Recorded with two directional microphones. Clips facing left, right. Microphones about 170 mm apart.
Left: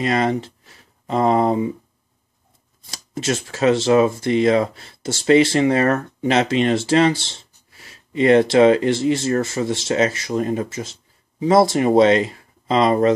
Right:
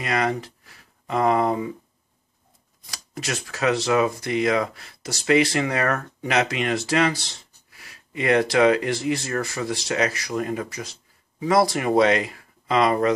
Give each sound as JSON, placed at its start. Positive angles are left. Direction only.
{"t": 0.0, "sound": "speech", "side_deg": 25}
{"t": 2.9, "sound": "speech", "side_deg": 25}